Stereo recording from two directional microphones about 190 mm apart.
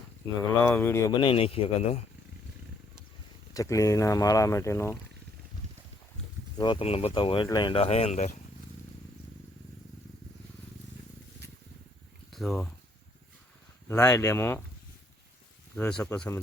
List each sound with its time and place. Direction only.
0.6 s speech: 10° left (ahead or behind)
1.1 s speech: 25° left (ahead or behind)
3.5 s speech: 15° left (ahead or behind)
6.6 s speech: 25° left (ahead or behind)
12.3 s speech: centre (ahead or behind)
13.8 s speech: 15° left (ahead or behind)
15.7 s speech: 5° left (ahead or behind)